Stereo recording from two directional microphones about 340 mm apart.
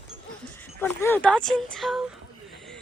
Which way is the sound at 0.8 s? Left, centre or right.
Centre.